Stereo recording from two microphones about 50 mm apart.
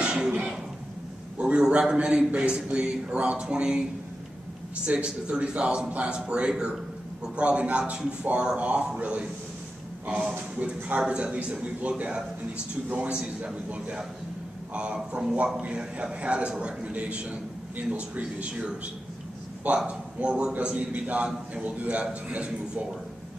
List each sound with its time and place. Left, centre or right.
0.0 s cough: centre
1.4 s a man's voice: centre
4.8 s a man's voice: right
13.1 s a man's voice: centre
13.7 s a man's voice: right
19.9 s a man's voice: right
21.6 s a man's voice: right